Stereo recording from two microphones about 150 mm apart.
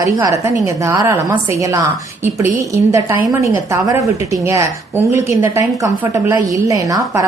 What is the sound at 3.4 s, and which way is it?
A woman's voice, 20° right (ahead or behind).